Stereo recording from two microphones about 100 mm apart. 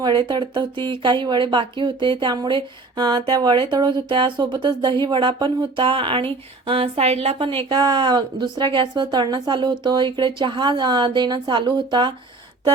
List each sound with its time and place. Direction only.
0.0 s speech: 50° right (ahead or behind); by 7.4 s 85° right
7.4 s speech: 50° right (ahead or behind)